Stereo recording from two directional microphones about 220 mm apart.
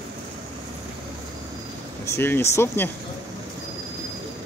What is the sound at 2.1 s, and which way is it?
Speech, 10° left (ahead or behind).